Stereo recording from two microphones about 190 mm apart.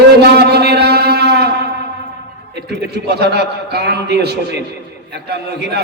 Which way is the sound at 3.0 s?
60° right (ahead or behind).